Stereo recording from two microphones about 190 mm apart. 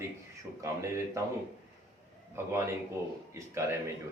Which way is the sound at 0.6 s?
15° right (ahead or behind).